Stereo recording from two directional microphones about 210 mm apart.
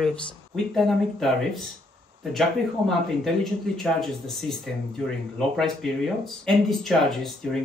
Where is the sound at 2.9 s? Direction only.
Centre (ahead or behind).